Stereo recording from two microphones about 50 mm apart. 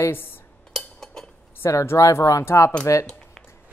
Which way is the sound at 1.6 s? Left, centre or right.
Left.